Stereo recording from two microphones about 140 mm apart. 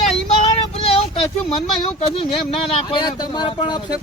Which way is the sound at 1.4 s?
40° left (ahead or behind).